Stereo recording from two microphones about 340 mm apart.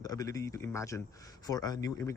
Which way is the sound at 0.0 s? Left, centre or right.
Centre.